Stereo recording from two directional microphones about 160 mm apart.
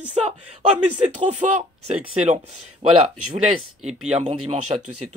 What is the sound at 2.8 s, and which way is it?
Speech, 40° right (ahead or behind).